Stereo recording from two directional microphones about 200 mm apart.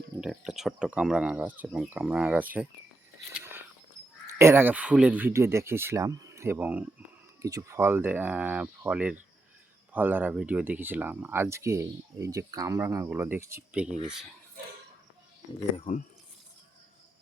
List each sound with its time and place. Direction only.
0.2 s speech: centre (ahead or behind)
3.3 s a sound: 10° right (ahead or behind)
4.4 s speech: 10° right (ahead or behind)
15.7 s speech: 35° left (ahead or behind)